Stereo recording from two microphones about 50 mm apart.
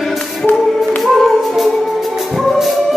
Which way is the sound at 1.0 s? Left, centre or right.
Centre.